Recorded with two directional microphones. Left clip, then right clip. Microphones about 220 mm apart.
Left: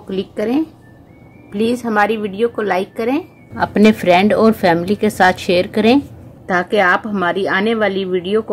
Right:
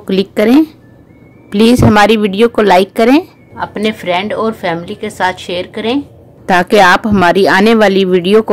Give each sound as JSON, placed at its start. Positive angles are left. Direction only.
{"t": 0.1, "sound": "a woman's voice", "side_deg": -40}
{"t": 3.5, "sound": "a woman's voice", "side_deg": 30}
{"t": 6.4, "sound": "a woman's voice", "side_deg": -45}